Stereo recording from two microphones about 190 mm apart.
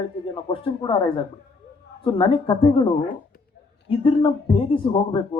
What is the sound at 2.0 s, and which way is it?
Speech, 30° left (ahead or behind).